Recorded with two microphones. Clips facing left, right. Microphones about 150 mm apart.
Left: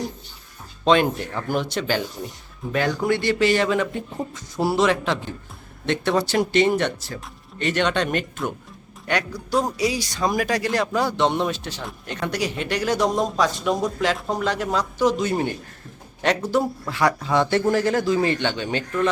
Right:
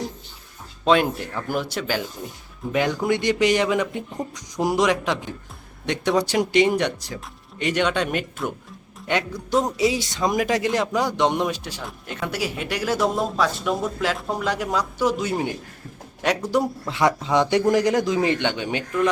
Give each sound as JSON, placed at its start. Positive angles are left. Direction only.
{"t": 0.9, "sound": "a man's voice", "side_deg": -5}
{"t": 2.7, "sound": "a man's voice", "side_deg": -15}
{"t": 9.0, "sound": "a man's voice", "side_deg": -20}